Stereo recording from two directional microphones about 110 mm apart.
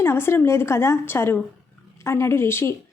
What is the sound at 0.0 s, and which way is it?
A woman's voice, 20° left (ahead or behind).